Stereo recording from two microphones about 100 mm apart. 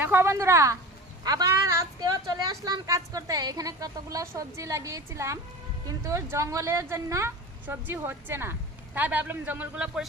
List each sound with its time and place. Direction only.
0.0 s a woman's voice: 25° right (ahead or behind); by 10.1 s 5° right (ahead or behind)